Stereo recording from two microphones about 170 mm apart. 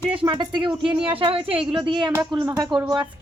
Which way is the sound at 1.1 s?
35° right (ahead or behind).